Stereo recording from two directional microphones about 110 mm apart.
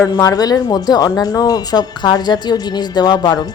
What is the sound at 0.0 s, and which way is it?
Speech, 35° left (ahead or behind).